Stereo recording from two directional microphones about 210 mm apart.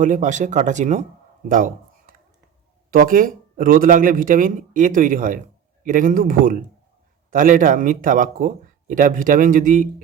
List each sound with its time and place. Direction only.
0.0 s speech: 35° right (ahead or behind)
1.5 s a sound: 40° right (ahead or behind)
2.9 s speech: 40° right (ahead or behind)